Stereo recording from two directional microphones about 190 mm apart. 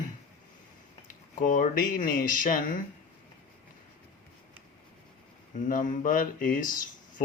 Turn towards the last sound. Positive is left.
turn(degrees=45)  # may be behind; listen again after turning